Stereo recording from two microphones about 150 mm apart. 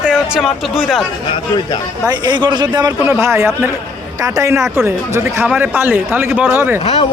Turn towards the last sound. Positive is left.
turn(degrees=40)  # may be behind; listen again after turning